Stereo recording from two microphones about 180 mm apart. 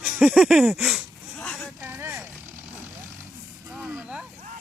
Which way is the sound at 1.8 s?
10° right (ahead or behind).